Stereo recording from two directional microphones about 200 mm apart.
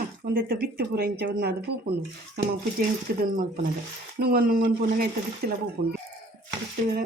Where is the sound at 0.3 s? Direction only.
45° right (ahead or behind).